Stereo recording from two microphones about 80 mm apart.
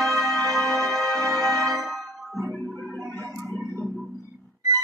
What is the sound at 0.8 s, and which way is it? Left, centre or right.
Music, centre.